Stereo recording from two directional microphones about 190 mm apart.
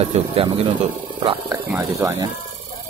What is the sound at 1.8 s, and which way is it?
Speech, 15° right (ahead or behind).